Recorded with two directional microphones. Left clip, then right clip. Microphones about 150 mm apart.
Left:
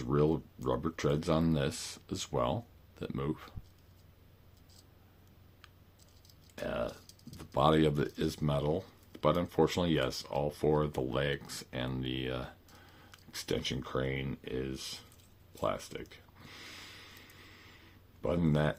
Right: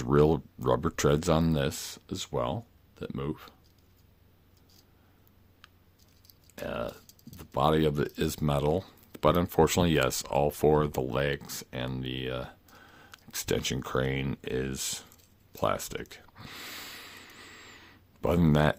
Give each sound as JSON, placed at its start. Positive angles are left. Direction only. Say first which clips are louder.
{"t": 0.0, "sound": "speech", "louder": "right 6 dB", "side_deg": -65}
{"t": 6.6, "sound": "speech", "louder": "right 1 dB", "side_deg": -25}
{"t": 8.1, "sound": "speech", "louder": "right 4 dB", "side_deg": -45}
{"t": 15.5, "sound": "a sound", "louder": "right 5 dB", "side_deg": -55}